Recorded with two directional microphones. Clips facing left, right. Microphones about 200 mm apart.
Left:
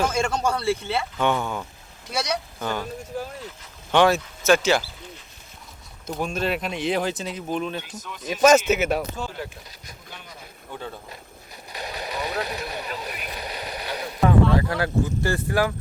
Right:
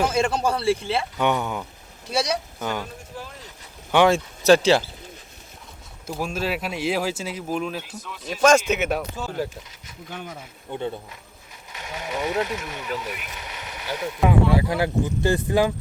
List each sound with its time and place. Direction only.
0.0 s speech: 5° right (ahead or behind)
0.6 s speech: 30° right (ahead or behind)
1.1 s speech: 20° right (ahead or behind)
3.1 s speech: 45° left (ahead or behind)
4.1 s speech: 30° right (ahead or behind)
6.1 s speech: 5° right (ahead or behind)
8.2 s speech: 10° left (ahead or behind)
10.7 s speech: 20° right (ahead or behind)
11.7 s a sound: 35° left (ahead or behind)
14.2 s speech: 10° right (ahead or behind)